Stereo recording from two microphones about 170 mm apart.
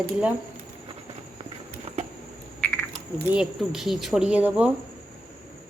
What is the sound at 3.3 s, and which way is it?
Speech, 5° right (ahead or behind).